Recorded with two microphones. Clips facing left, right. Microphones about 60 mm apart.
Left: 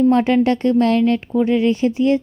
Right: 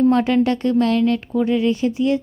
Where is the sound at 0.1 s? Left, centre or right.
Left.